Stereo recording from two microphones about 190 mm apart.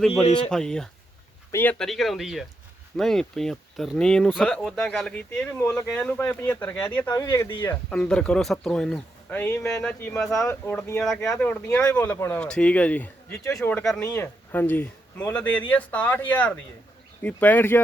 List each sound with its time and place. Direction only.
0.1 s speech: 30° left (ahead or behind)
0.5 s speech: 5° left (ahead or behind)